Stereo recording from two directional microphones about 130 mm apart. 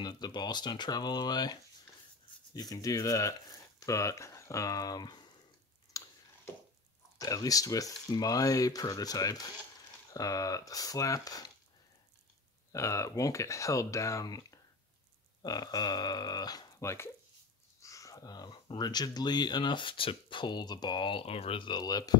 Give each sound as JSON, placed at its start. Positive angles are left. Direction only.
{"t": 0.0, "sound": "speech", "side_deg": 35}
{"t": 5.9, "sound": "a sound", "side_deg": 25}
{"t": 7.2, "sound": "speech", "side_deg": 30}
{"t": 12.7, "sound": "speech", "side_deg": 25}